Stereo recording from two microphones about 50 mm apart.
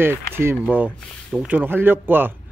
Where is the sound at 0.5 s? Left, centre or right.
Right.